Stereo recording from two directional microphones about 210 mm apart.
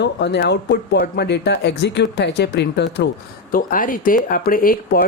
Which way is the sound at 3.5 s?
40° left (ahead or behind).